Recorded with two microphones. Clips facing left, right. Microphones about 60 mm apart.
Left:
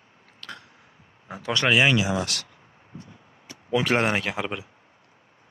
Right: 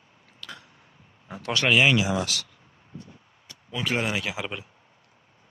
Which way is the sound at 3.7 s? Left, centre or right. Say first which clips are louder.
Left 5 dB; left.